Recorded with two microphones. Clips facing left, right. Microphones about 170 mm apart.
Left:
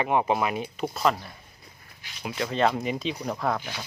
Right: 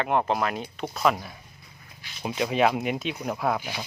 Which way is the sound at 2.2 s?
25° right (ahead or behind).